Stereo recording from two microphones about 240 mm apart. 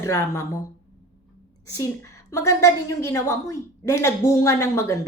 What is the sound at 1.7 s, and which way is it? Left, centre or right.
Speech, centre.